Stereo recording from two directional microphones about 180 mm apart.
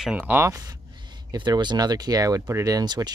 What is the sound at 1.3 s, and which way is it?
Speech, 25° right (ahead or behind).